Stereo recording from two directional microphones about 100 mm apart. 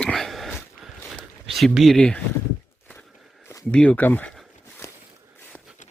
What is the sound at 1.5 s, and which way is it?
Speech, centre (ahead or behind).